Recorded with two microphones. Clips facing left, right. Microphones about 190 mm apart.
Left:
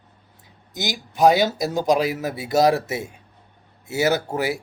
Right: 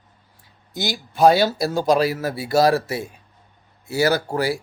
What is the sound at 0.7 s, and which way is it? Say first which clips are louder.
Speech: right 2 dB; 15° left (ahead or behind).